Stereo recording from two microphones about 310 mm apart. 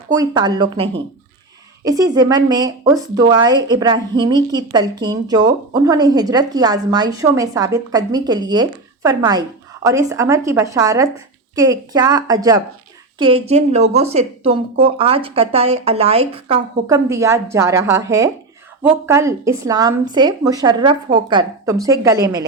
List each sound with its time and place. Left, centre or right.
0.1 s a woman's voice: centre